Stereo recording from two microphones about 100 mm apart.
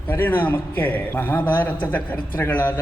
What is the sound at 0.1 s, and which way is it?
A man's voice, 20° left (ahead or behind).